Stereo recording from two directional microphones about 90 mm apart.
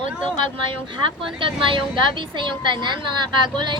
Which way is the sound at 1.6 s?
65° right (ahead or behind).